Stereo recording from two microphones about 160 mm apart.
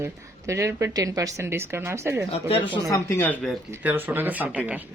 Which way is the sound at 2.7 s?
20° left (ahead or behind).